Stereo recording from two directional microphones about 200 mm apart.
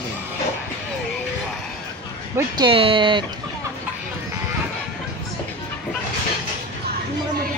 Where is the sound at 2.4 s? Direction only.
20° right (ahead or behind).